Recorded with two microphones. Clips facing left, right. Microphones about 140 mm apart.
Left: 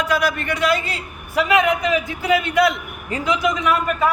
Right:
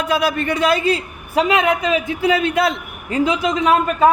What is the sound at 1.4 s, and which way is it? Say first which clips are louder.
Speech: right 1 dB; 25° right (ahead or behind).